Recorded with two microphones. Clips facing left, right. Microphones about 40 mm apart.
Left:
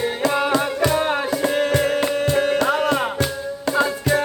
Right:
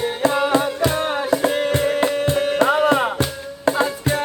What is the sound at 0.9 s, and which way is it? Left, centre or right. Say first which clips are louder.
Music: even; centre.